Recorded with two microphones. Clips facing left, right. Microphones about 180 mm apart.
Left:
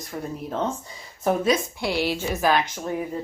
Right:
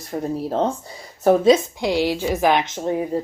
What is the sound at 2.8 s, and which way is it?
Speech, 30° right (ahead or behind).